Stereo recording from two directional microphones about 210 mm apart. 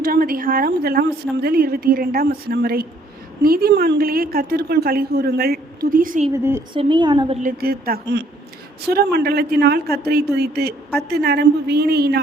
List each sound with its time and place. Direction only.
0.0 s speech: 45° right (ahead or behind)
6.3 s a woman's voice: 10° right (ahead or behind)
6.7 s a woman's voice: 25° right (ahead or behind)
7.4 s speech: 45° right (ahead or behind)